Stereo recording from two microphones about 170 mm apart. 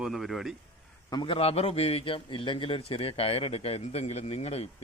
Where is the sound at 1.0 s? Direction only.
25° left (ahead or behind).